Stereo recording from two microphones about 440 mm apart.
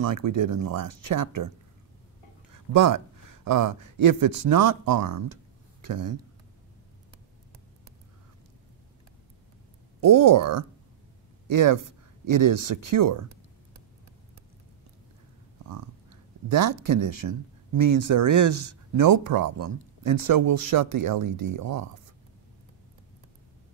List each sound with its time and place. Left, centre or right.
0.0 s speech: right
2.7 s speech: right
9.9 s speech: right
16.4 s speech: right